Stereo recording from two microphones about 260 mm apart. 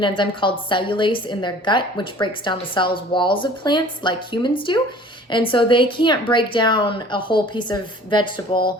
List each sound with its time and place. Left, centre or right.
0.0 s a woman's voice: centre